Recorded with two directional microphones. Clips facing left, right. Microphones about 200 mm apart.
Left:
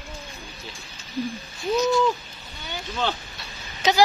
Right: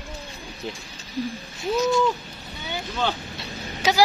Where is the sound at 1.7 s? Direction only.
5° right (ahead or behind).